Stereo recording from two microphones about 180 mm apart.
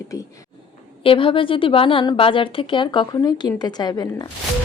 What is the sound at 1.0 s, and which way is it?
A woman's voice, 30° left (ahead or behind).